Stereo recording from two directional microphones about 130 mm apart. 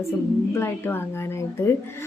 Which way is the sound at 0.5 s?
20° left (ahead or behind).